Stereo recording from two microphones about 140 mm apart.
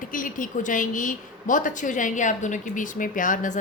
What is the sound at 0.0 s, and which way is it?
A woman's voice, 75° left (ahead or behind).